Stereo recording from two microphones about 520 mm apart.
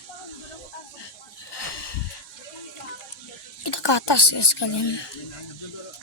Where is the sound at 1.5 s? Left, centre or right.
Left.